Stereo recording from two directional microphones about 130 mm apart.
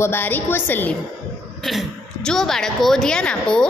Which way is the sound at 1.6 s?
Centre (ahead or behind).